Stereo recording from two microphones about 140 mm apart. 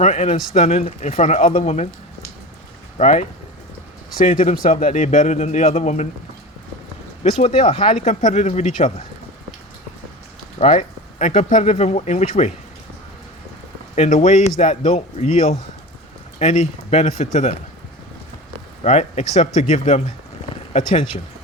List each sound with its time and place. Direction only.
0.0 s a man's voice: 55° left (ahead or behind); by 1.6 s 70° left (ahead or behind)
1.6 s a man's voice: 55° left (ahead or behind)
3.0 s a man's voice: 60° left (ahead or behind)
4.4 s a man's voice: 80° left; by 6.1 s 55° left (ahead or behind)
8.0 s speech: 55° left (ahead or behind)
10.6 s speech: 55° left (ahead or behind)
13.9 s speech: 50° left (ahead or behind)
18.8 s speech: 50° left (ahead or behind)